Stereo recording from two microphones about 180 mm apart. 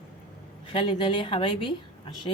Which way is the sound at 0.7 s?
30° left (ahead or behind).